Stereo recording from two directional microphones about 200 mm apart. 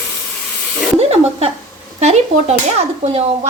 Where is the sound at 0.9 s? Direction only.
30° right (ahead or behind).